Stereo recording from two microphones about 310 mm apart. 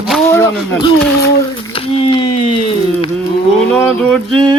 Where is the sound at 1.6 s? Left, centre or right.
Centre.